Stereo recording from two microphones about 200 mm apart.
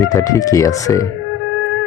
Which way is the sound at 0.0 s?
15° left (ahead or behind).